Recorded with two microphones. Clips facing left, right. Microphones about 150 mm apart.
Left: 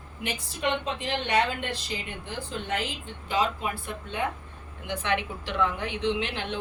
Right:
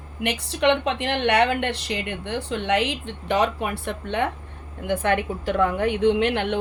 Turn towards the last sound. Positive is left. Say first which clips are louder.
# right 9 dB
turn(degrees=-60)  # may be behind; listen again after turning